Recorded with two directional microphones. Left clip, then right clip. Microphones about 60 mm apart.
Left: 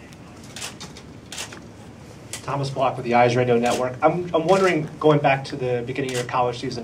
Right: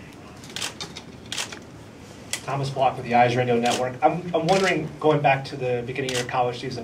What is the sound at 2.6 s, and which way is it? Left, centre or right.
A man's voice, left.